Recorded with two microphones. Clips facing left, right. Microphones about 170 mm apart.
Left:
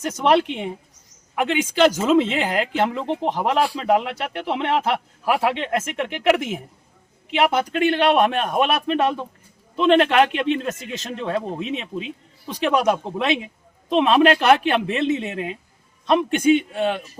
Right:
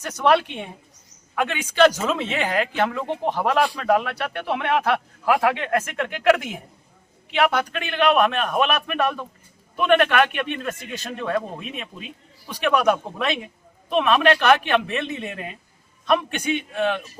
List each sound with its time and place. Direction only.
0.0 s a man's voice: 20° left (ahead or behind)
3.8 s speech: 20° left (ahead or behind)
16.7 s speech: 30° left (ahead or behind)